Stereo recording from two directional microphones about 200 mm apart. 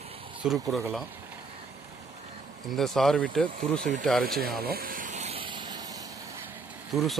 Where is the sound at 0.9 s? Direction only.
5° right (ahead or behind).